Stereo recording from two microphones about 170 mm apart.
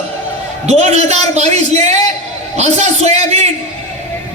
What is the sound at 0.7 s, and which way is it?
A man's voice, 40° right (ahead or behind).